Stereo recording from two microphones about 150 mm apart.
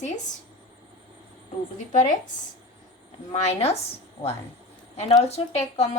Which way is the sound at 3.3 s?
45° left (ahead or behind).